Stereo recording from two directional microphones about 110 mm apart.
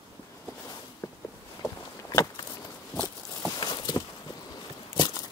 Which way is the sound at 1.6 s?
30° left (ahead or behind).